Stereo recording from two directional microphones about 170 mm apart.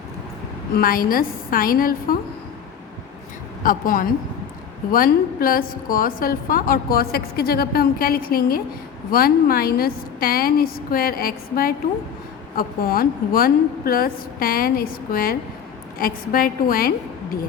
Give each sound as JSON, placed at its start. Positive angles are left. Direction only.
{"t": 0.7, "sound": "a woman's voice", "side_deg": 60}
{"t": 3.6, "sound": "a woman's voice", "side_deg": 55}